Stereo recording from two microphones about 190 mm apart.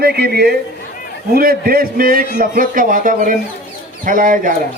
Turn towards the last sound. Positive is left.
turn(degrees=-45)  # may be behind; listen again after turning